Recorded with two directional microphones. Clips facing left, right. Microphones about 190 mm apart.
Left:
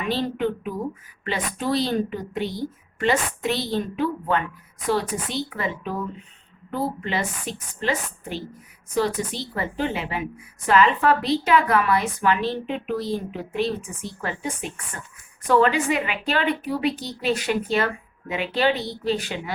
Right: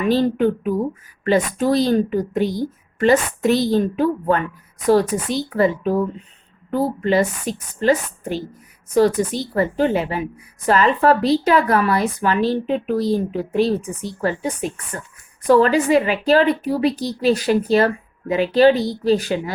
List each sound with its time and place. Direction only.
0.1 s a woman's voice: 45° right (ahead or behind)